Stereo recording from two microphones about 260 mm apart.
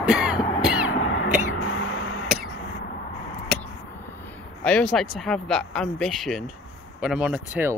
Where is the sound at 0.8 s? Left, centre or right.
Left.